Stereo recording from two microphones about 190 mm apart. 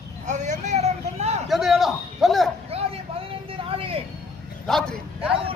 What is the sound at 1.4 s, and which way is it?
Speech, centre (ahead or behind).